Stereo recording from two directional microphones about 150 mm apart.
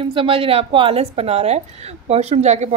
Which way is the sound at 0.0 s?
35° right (ahead or behind).